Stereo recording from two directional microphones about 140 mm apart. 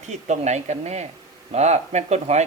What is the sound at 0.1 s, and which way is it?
A man's voice, 55° right (ahead or behind).